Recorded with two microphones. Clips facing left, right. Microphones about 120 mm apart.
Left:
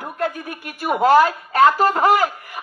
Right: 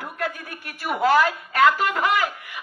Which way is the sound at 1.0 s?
35° left (ahead or behind).